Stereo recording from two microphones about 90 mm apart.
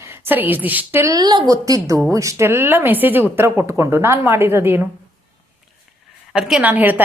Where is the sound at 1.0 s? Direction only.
50° right (ahead or behind); by 4.9 s 25° right (ahead or behind).